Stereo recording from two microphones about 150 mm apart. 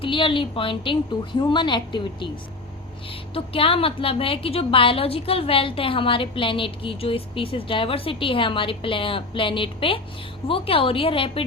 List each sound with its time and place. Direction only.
0.0 s a woman's voice: 35° left (ahead or behind)